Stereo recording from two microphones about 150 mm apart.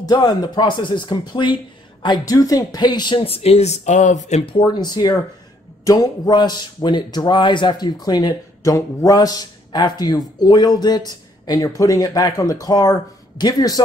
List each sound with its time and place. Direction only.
0.0 s a man's voice: 25° left (ahead or behind)